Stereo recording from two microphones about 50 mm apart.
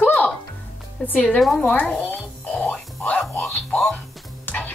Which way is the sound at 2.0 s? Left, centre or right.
Left.